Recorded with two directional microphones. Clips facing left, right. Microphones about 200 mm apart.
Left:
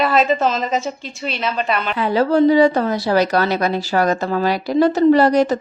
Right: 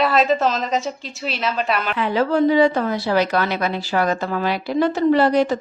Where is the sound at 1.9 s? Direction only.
35° left (ahead or behind).